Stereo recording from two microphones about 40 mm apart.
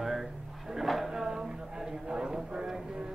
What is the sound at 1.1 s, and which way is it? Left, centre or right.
Speech, centre.